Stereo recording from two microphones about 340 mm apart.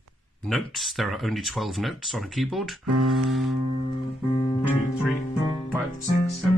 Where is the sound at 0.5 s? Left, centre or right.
Centre.